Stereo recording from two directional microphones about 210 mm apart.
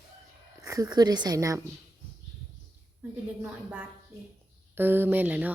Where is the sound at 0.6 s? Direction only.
20° right (ahead or behind).